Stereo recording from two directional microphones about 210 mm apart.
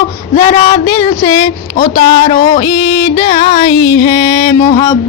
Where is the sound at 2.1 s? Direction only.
25° left (ahead or behind).